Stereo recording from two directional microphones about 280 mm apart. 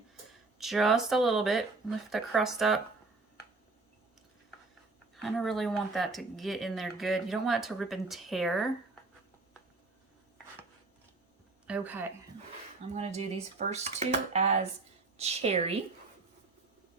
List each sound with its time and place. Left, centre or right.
0.6 s speech: centre
5.1 s speech: centre
11.6 s speech: centre
12.9 s speech: right